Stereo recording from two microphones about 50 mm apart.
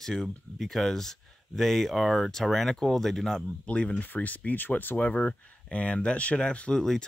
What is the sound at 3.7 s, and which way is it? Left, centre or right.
Speech, left.